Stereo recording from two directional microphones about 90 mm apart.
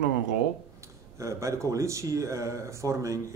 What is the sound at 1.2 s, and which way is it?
Speech, 35° right (ahead or behind).